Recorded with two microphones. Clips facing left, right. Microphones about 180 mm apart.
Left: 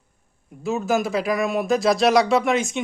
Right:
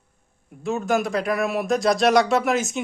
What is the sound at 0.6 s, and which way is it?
Speech, centre (ahead or behind).